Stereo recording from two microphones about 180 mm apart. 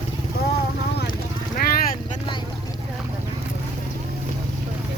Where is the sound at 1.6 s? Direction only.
55° left (ahead or behind).